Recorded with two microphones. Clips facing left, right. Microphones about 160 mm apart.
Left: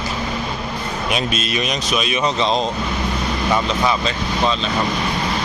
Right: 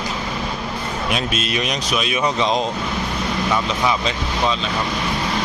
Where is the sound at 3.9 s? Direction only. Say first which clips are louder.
Left 1 dB; 10° right (ahead or behind).